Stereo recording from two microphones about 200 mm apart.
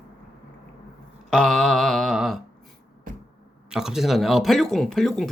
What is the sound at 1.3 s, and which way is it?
Speech, 5° left (ahead or behind).